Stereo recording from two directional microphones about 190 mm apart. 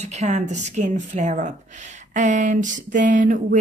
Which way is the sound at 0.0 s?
35° right (ahead or behind).